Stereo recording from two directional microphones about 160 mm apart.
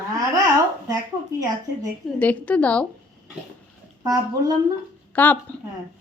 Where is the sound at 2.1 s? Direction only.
10° left (ahead or behind).